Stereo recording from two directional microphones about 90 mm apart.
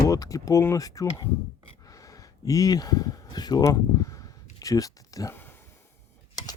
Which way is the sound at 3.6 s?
40° left (ahead or behind).